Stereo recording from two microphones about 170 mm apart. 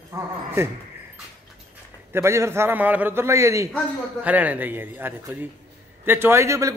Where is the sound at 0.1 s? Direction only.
20° right (ahead or behind).